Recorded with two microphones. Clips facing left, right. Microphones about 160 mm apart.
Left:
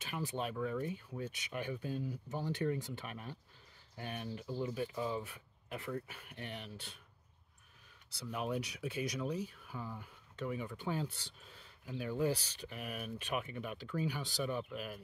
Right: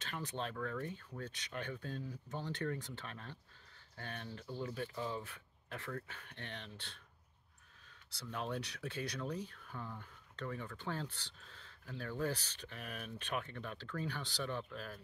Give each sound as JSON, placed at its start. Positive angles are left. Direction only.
{"t": 0.0, "sound": "speech", "side_deg": 10}
{"t": 8.3, "sound": "speech", "side_deg": 10}